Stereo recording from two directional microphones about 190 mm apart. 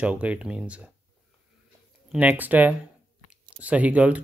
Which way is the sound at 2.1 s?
10° right (ahead or behind).